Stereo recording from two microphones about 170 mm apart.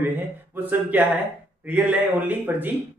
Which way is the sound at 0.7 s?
10° right (ahead or behind).